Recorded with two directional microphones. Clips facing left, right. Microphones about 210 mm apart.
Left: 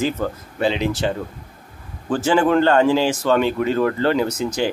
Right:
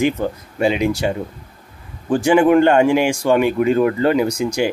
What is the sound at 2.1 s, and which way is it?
Speech, 15° right (ahead or behind).